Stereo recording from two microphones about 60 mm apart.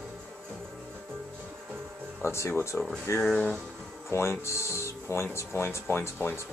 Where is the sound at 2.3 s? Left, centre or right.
Left.